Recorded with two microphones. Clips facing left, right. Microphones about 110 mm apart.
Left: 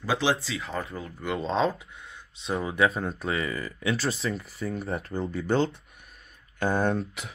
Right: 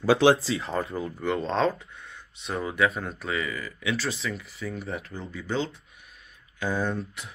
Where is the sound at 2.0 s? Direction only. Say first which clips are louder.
Even; 25° left (ahead or behind); by 7.3 s 75° left (ahead or behind).